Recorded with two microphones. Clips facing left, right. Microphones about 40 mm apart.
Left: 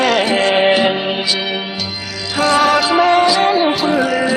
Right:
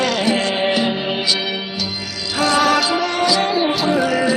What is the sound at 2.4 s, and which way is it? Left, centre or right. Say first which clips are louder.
Music: left 3 dB; centre.